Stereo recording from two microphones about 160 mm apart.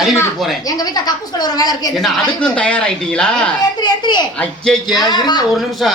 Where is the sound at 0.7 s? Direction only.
25° left (ahead or behind).